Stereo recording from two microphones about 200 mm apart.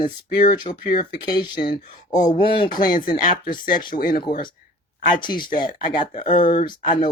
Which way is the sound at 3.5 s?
45° left (ahead or behind).